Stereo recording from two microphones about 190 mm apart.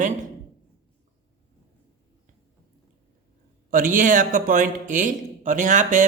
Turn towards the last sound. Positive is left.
turn(degrees=-40)  # may be behind; listen again after turning